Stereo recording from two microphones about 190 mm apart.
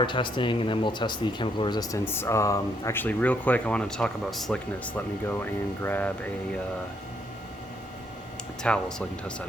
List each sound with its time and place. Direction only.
0.0 s speech: 25° left (ahead or behind); by 6.1 s 10° left (ahead or behind)
8.6 s speech: 5° left (ahead or behind)